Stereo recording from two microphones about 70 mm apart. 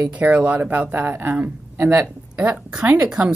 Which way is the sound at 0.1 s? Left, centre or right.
Centre.